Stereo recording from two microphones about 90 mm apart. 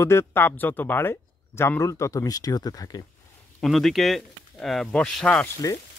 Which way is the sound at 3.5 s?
5° left (ahead or behind).